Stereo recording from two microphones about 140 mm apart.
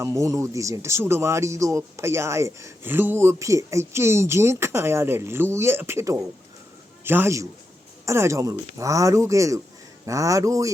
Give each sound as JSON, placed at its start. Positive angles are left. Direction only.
{"t": 0.0, "sound": "a man's voice", "side_deg": -20}